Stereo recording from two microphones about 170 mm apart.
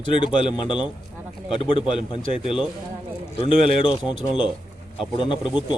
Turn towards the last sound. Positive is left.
turn(degrees=30)  # may be behind; listen again after turning